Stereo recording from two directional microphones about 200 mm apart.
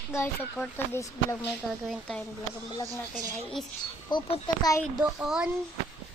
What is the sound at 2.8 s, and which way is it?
Speech, 15° right (ahead or behind).